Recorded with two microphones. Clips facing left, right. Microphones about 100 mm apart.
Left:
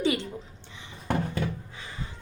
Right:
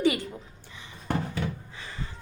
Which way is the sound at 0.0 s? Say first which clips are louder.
Right 2 dB; 25° left (ahead or behind).